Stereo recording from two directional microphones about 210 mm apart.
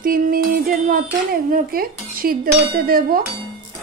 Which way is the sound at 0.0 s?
45° right (ahead or behind).